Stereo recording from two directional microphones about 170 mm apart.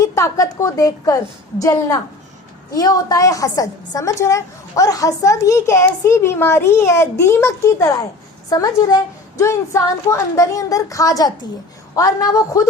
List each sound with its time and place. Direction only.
0.0 s a woman's voice: 20° left (ahead or behind)